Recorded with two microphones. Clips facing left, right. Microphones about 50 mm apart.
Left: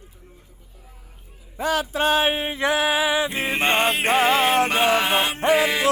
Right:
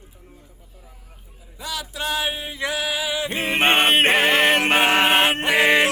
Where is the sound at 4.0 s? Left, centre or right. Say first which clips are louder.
Right 2 dB; right.